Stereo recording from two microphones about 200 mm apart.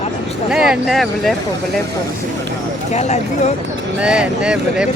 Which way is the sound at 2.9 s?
35° left (ahead or behind).